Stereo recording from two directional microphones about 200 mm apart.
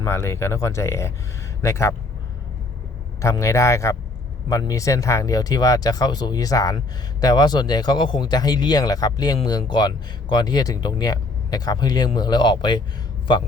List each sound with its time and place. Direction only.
0.0 s speech: 15° left (ahead or behind)
3.2 s speech: 15° left (ahead or behind)